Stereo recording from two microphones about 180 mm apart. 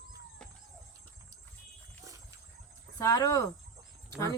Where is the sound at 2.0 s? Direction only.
15° right (ahead or behind).